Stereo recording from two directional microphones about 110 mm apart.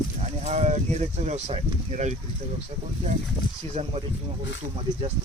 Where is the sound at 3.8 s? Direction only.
80° right.